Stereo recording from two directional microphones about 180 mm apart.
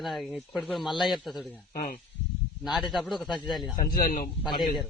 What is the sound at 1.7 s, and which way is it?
Speech, 50° left (ahead or behind).